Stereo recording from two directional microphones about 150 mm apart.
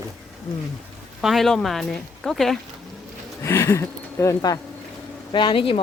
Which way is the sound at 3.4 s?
20° left (ahead or behind).